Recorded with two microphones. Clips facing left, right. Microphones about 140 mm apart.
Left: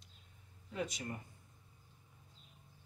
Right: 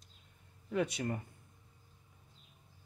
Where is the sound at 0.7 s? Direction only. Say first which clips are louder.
Right 7 dB; 60° right (ahead or behind).